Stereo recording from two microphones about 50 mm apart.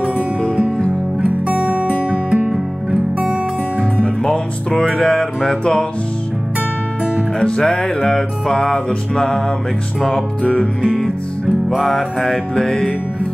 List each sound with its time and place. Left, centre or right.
1.2 s music: right
4.0 s music: centre
7.3 s music: centre
10.4 s music: centre
11.4 s music: centre